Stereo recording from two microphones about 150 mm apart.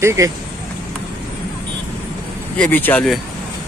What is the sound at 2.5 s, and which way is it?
Speech, 10° left (ahead or behind).